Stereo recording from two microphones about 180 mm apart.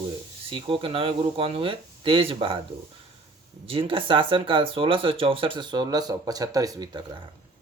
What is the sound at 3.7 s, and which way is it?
Speech, 30° right (ahead or behind).